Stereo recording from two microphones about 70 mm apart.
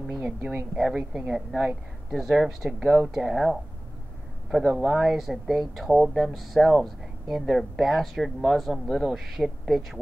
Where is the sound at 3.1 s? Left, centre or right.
Centre.